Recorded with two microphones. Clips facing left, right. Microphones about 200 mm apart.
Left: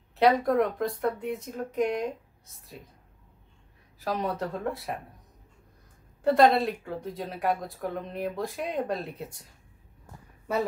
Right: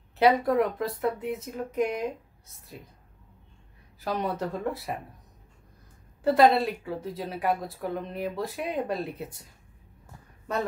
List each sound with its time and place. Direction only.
0.2 s speech: centre (ahead or behind)
4.0 s speech: centre (ahead or behind)
6.2 s speech: centre (ahead or behind)